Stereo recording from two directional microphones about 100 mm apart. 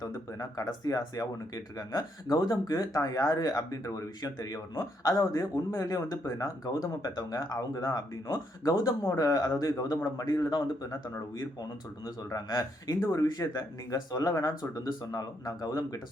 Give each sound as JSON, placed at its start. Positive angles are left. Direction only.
{"t": 0.0, "sound": "speech", "side_deg": 40}
{"t": 12.0, "sound": "speech", "side_deg": 40}